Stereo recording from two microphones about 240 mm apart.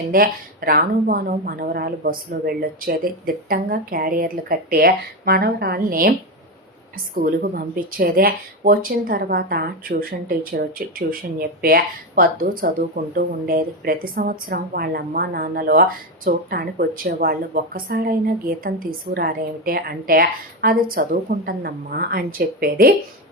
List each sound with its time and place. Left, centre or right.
0.1 s a woman's voice: right
7.2 s a woman's voice: right